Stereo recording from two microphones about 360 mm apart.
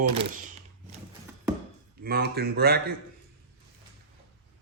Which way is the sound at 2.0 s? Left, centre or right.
Right.